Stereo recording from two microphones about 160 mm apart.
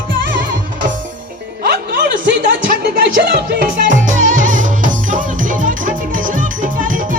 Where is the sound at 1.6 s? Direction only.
85° right.